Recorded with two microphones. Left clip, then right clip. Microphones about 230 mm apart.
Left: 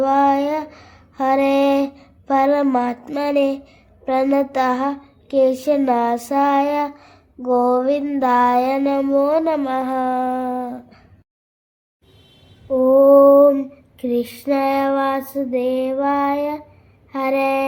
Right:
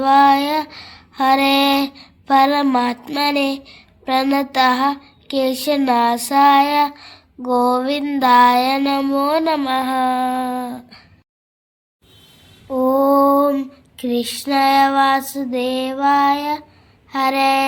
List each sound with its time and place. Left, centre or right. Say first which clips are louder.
0.0 s a sound: right 3 dB; right
4.0 s speech: even; right
12.7 s female singing: left 4 dB; right